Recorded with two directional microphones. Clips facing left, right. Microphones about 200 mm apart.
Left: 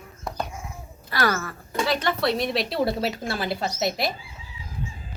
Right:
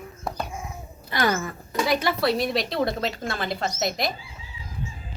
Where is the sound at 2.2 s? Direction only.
Centre (ahead or behind).